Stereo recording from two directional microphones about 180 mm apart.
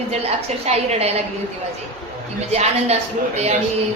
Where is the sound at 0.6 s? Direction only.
35° right (ahead or behind).